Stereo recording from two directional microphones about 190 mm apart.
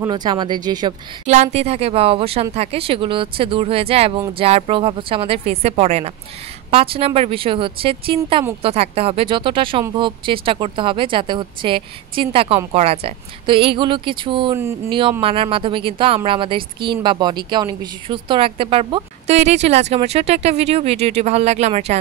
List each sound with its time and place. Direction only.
0.0 s speech: 25° right (ahead or behind)
1.2 s a woman's voice: 35° right (ahead or behind)